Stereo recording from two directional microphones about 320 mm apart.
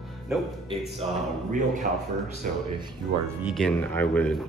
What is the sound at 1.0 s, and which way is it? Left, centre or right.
Speech, centre.